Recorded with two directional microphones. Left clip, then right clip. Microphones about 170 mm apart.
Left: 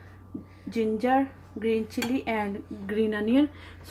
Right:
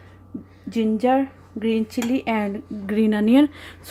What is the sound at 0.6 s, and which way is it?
A woman's voice, 35° right (ahead or behind).